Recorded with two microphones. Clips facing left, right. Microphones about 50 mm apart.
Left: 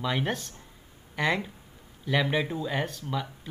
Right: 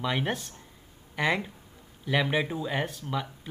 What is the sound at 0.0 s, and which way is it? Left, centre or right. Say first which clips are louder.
Speech: even; centre.